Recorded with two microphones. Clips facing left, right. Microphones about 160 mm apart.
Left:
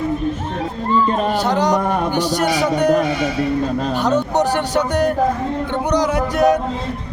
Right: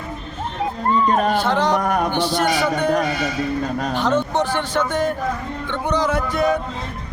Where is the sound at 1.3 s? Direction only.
15° left (ahead or behind).